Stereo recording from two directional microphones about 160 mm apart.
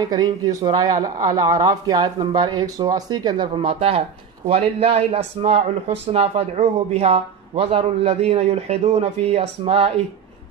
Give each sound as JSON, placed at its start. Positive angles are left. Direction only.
{"t": 0.0, "sound": "speech", "side_deg": -25}